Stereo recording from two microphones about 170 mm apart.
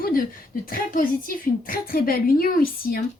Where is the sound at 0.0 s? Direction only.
55° left (ahead or behind).